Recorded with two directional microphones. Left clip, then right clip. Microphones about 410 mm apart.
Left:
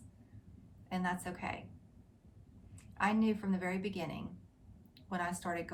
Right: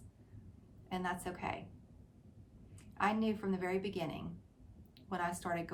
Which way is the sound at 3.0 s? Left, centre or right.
Centre.